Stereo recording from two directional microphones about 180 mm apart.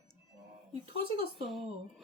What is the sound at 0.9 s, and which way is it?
Speech, 30° right (ahead or behind).